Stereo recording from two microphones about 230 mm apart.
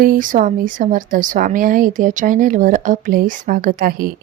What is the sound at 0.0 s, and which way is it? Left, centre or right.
A woman's voice, right.